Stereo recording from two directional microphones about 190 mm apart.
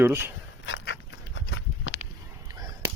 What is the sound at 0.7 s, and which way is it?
Dog, 75° left (ahead or behind).